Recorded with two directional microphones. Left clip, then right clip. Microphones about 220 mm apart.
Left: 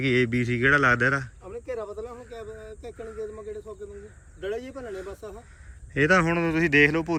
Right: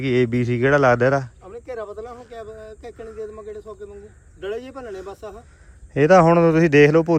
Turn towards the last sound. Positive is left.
turn(degrees=-35)  # may be behind; listen again after turning